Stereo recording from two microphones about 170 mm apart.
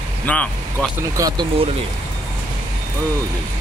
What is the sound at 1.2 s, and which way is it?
Speech, 20° right (ahead or behind).